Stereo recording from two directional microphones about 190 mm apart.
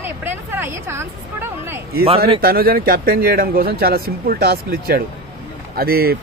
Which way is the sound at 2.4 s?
50° right (ahead or behind).